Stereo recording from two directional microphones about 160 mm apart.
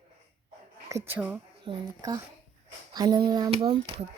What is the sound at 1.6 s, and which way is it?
Speech, 25° right (ahead or behind).